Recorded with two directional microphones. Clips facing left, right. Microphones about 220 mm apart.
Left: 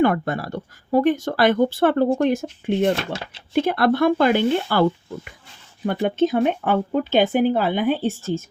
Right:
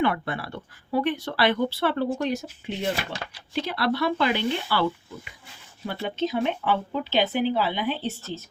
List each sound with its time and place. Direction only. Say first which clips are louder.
0.0 s speech: left 6 dB; 45° left (ahead or behind)